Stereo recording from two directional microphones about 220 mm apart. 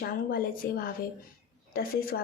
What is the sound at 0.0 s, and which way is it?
Speech, 40° left (ahead or behind).